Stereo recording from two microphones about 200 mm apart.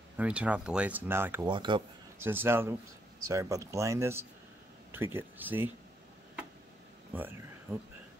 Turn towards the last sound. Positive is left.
turn(degrees=-10)  # may be behind; listen again after turning